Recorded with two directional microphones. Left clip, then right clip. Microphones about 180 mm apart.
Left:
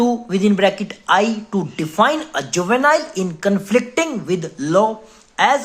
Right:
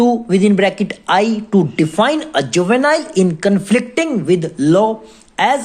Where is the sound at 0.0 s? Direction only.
20° right (ahead or behind).